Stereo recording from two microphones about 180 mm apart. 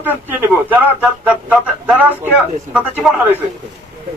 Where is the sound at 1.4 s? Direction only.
5° right (ahead or behind).